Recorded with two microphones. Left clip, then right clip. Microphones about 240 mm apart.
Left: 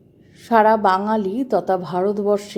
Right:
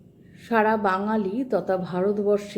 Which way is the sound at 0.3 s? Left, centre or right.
Left.